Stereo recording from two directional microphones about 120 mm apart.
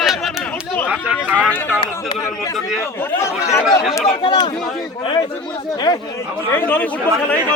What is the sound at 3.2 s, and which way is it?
Speech, 25° left (ahead or behind).